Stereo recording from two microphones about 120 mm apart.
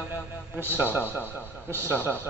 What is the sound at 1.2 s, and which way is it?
Speech, 15° left (ahead or behind).